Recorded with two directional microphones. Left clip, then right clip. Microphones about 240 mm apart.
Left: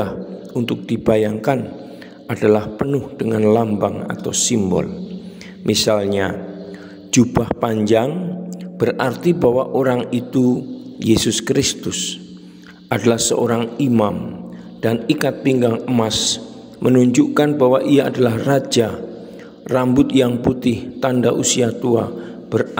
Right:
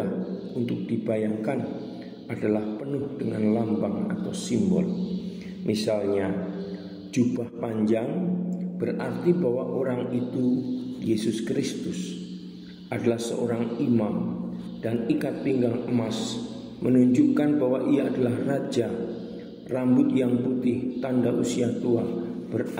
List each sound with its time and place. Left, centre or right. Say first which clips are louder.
0.7 s a man's voice: left 12 dB; left